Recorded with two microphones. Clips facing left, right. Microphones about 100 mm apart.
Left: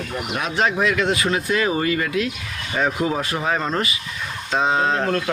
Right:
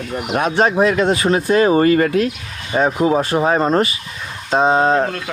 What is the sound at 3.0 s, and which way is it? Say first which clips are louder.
Speech: right 7 dB; 30° right (ahead or behind).